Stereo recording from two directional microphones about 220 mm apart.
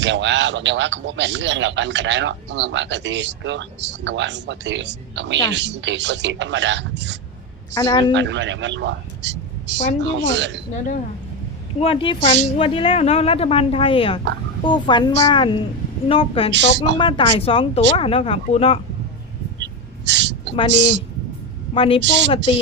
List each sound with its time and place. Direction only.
0.0 s a man's voice: 55° right (ahead or behind)
7.7 s a woman's voice: 15° left (ahead or behind)
8.1 s a man's voice: 55° right (ahead or behind)
11.8 s a woman's voice: 25° left (ahead or behind)
16.5 s a woman's voice: 55° right (ahead or behind)
17.0 s a woman's voice: 20° left (ahead or behind)
19.5 s gasp: 55° right (ahead or behind)
21.8 s a woman's voice: 25° left (ahead or behind)
22.0 s a woman's voice: 55° right (ahead or behind)
22.5 s a woman's voice: 25° left (ahead or behind)